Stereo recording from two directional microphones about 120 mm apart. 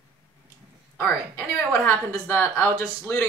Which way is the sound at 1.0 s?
10° left (ahead or behind).